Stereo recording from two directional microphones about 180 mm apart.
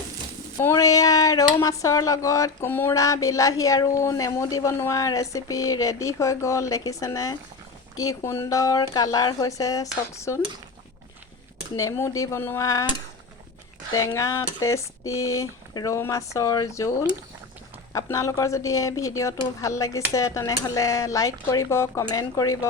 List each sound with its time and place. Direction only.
0.6 s speech: 15° left (ahead or behind)
11.8 s speech: 15° left (ahead or behind)
13.9 s speech: 15° left (ahead or behind)
17.9 s speech: 15° left (ahead or behind)